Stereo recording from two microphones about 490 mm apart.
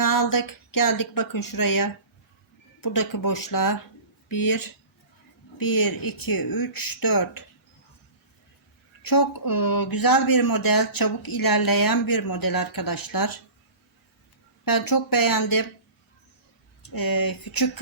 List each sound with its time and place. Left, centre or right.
0.0 s speech: left
9.0 s speech: left
14.6 s speech: left
16.8 s speech: left